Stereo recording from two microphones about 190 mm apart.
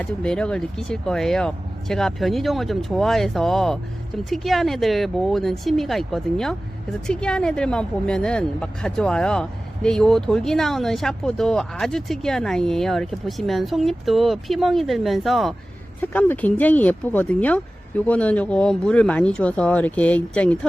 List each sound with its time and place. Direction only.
0.0 s a woman's voice: 5° left (ahead or behind)